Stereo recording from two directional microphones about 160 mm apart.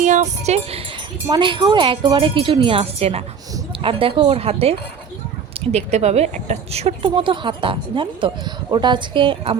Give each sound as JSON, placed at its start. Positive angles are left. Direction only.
{"t": 0.0, "sound": "music", "side_deg": -50}
{"t": 1.3, "sound": "speech", "side_deg": -30}